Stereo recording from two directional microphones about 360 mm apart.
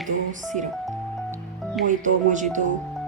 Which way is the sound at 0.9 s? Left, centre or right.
Centre.